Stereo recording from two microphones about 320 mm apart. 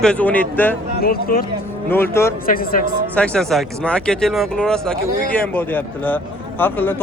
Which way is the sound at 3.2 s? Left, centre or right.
Centre.